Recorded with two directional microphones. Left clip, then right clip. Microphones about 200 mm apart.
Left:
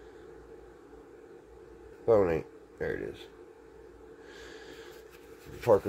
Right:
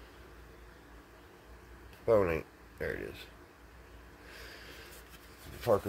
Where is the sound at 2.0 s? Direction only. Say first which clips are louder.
Left 3 dB; centre (ahead or behind).